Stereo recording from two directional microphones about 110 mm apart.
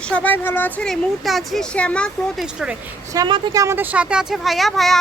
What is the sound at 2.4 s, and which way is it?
Speech, 10° right (ahead or behind).